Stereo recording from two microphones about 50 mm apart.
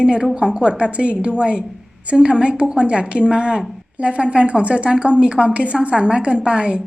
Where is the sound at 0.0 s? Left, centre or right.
Centre.